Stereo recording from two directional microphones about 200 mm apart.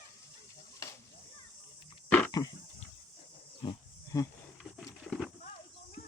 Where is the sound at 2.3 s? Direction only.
20° left (ahead or behind).